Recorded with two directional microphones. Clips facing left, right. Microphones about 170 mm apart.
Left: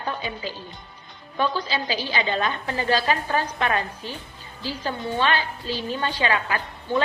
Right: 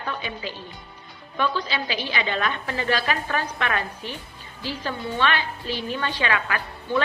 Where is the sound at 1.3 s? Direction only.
35° left (ahead or behind).